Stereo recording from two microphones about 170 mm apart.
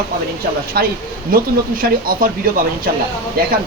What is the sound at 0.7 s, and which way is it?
Speech, 65° right (ahead or behind).